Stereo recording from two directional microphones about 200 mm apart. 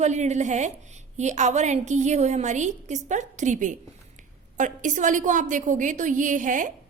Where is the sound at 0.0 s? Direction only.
35° right (ahead or behind).